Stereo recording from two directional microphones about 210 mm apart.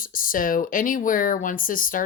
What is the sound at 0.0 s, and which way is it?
Speech, 40° left (ahead or behind).